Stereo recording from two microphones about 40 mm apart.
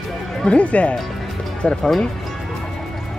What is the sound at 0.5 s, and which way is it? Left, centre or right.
Speech, left.